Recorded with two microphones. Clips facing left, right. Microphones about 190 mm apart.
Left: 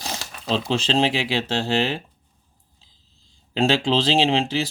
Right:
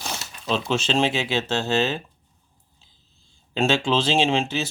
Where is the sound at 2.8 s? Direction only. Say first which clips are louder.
Even; 90° left.